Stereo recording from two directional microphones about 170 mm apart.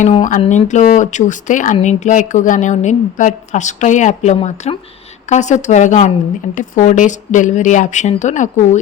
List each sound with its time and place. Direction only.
0.1 s speech: 45° left (ahead or behind)